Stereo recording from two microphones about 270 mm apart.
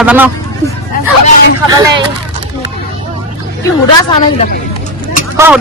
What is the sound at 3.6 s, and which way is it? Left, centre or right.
Speech, centre.